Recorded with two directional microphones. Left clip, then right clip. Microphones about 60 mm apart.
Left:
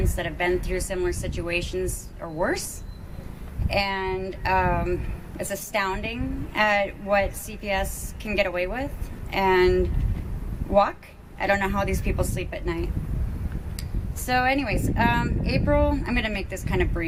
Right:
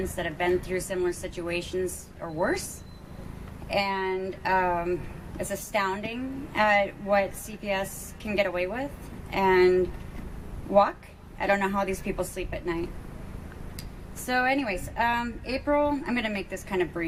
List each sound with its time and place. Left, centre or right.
0.0 s a woman's voice: left
2.2 s a woman's voice: left
3.7 s a woman's voice: left
14.3 s a woman's voice: left